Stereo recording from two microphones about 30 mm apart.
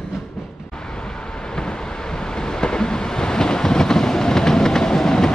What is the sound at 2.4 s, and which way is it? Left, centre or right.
Vehicle, left.